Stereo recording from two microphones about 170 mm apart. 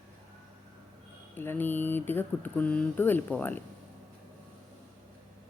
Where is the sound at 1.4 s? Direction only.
10° left (ahead or behind).